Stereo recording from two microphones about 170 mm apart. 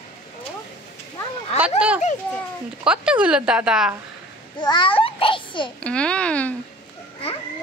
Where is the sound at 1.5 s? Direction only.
5° right (ahead or behind).